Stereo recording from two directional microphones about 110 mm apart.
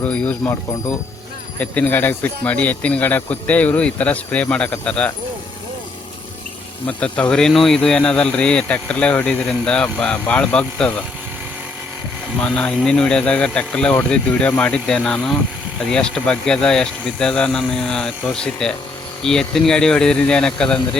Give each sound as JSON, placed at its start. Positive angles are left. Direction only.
{"t": 0.0, "sound": "speech", "side_deg": 10}
{"t": 0.4, "sound": "speech", "side_deg": 30}
{"t": 1.5, "sound": "speech", "side_deg": 15}
{"t": 6.8, "sound": "speech", "side_deg": 10}
{"t": 12.4, "sound": "speech", "side_deg": 10}